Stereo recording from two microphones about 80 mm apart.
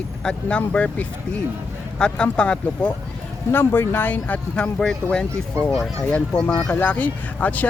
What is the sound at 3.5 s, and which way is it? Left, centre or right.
Speech, left.